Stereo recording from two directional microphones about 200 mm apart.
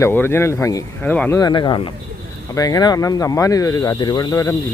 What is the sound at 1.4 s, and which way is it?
Speech, 20° left (ahead or behind).